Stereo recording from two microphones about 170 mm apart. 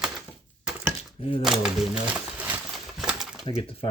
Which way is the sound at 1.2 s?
35° left (ahead or behind).